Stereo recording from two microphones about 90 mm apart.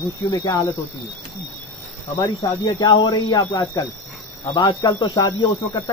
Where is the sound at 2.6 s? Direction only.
55° left (ahead or behind).